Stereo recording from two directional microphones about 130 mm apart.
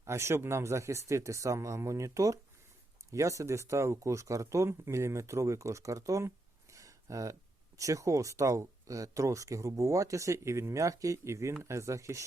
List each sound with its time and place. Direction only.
0.0 s speech: 20° right (ahead or behind)